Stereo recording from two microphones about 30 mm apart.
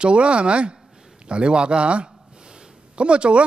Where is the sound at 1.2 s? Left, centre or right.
Right.